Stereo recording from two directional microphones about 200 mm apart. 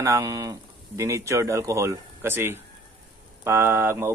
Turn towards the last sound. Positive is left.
turn(degrees=-10)  # may be behind; listen again after turning